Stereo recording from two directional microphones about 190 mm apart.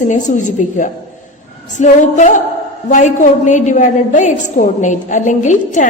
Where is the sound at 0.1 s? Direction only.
40° left (ahead or behind).